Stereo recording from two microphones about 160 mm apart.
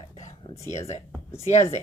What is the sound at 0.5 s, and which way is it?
Speech, 20° left (ahead or behind).